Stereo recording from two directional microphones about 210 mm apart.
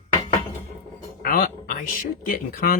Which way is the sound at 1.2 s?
45° left (ahead or behind).